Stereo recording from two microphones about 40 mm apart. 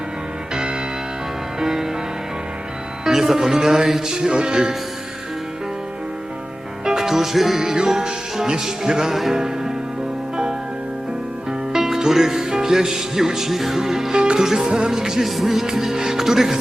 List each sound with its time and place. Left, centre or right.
0.5 s music: centre
3.0 s music: centre
6.8 s music: centre
11.7 s speech: centre
14.2 s music: centre